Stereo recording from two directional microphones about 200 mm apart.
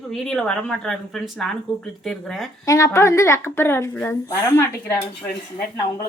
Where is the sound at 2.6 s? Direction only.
15° left (ahead or behind).